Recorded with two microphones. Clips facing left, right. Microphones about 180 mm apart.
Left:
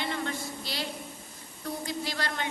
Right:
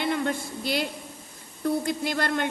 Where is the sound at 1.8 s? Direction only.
55° right (ahead or behind).